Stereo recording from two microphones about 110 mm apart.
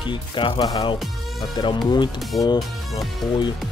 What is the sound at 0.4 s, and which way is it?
Speech, 50° left (ahead or behind).